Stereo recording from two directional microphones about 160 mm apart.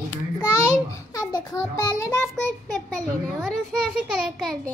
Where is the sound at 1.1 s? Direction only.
20° left (ahead or behind).